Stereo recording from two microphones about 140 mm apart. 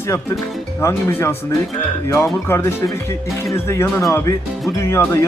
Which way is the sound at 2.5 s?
20° left (ahead or behind).